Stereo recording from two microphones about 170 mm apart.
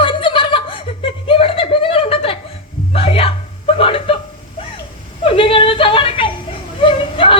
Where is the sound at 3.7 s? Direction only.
30° left (ahead or behind).